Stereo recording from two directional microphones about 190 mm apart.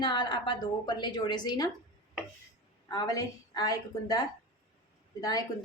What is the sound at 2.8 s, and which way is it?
Speech, 20° left (ahead or behind).